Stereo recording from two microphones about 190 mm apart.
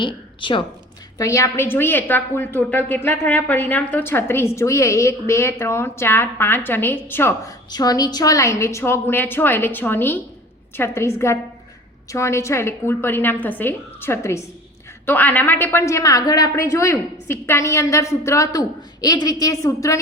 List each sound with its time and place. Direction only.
0.0 s a woman's voice: 25° left (ahead or behind)